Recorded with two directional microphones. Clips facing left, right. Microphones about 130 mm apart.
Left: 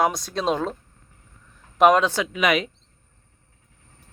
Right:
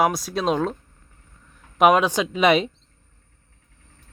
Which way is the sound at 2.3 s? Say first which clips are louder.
Right 6 dB; 30° right (ahead or behind).